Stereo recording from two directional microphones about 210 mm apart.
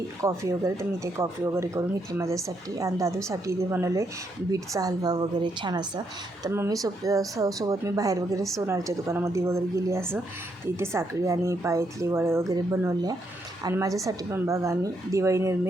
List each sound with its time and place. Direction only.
0.2 s speech: 15° right (ahead or behind)